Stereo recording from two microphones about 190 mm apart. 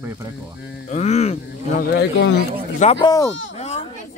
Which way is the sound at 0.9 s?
35° left (ahead or behind).